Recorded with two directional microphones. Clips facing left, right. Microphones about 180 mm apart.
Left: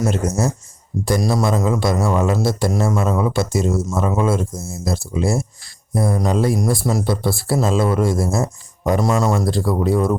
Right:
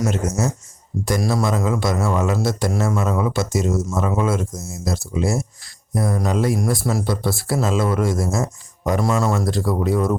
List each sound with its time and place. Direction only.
0.0 s a man's voice: 35° left (ahead or behind)
9.3 s speech: 30° left (ahead or behind)